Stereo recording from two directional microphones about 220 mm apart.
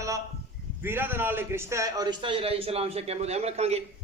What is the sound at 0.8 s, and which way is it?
A man's voice, 10° right (ahead or behind).